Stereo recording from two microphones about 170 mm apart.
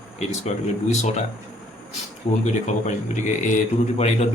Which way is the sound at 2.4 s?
45° left (ahead or behind).